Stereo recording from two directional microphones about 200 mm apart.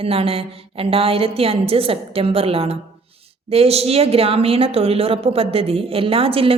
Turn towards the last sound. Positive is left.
turn(degrees=-30)  # may be behind; listen again after turning